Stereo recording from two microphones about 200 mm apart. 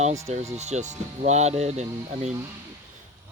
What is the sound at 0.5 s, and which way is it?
Speech, 35° right (ahead or behind).